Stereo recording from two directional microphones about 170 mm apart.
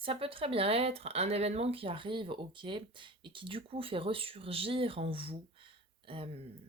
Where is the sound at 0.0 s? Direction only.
30° right (ahead or behind).